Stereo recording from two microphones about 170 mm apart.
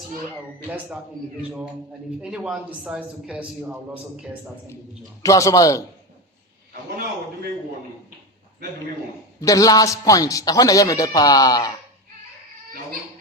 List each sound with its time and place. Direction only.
2.3 s a man's voice: 5° right (ahead or behind)
5.2 s speech: 20° left (ahead or behind)
9.4 s speech: 20° left (ahead or behind)